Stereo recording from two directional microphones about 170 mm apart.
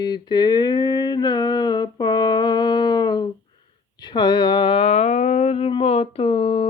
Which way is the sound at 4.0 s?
25° left (ahead or behind).